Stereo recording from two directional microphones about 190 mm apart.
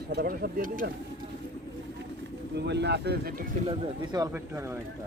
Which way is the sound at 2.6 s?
65° right (ahead or behind).